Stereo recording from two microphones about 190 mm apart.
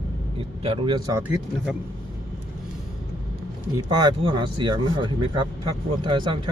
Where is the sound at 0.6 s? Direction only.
30° right (ahead or behind).